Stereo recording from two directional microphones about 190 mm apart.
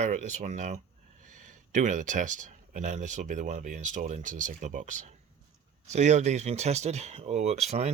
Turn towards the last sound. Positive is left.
turn(degrees=-35)  # may be behind; listen again after turning